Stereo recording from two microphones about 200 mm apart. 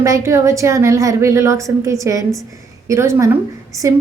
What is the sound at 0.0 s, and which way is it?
A woman's voice, 15° right (ahead or behind).